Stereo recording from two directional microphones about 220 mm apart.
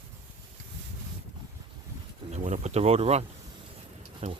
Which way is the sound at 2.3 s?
30° right (ahead or behind).